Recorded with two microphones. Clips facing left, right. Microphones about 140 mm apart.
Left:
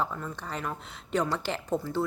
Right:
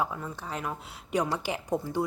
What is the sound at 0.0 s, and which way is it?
Speech, 10° right (ahead or behind).